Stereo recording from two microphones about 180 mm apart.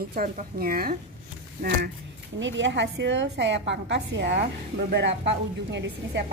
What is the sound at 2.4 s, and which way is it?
A woman's voice, 85° right.